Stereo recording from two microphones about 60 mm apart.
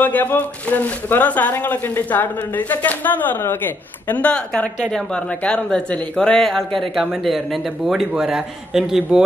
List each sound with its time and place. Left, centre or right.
0.0 s speech: left
4.9 s speech: centre
6.4 s speech: centre
8.1 s a man's voice: centre